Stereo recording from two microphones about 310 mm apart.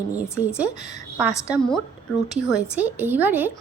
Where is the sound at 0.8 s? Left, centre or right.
Right.